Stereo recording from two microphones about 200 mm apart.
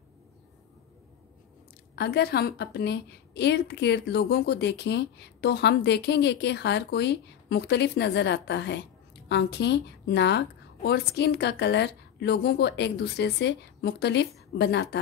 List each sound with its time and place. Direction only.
2.0 s a woman's voice: 55° left (ahead or behind)